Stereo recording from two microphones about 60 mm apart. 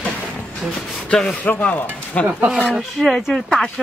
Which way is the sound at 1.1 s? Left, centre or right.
Centre.